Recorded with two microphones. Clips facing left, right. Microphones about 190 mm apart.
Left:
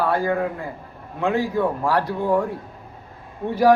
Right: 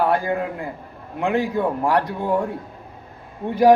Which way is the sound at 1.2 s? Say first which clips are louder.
Even; 15° right (ahead or behind).